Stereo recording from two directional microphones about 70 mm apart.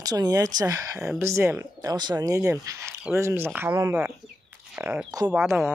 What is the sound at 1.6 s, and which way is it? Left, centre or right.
Speech, right.